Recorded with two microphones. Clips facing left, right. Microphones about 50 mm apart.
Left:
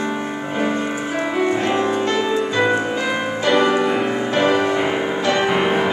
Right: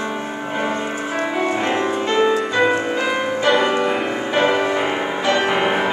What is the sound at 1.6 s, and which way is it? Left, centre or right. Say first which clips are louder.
Music: left 1 dB; right.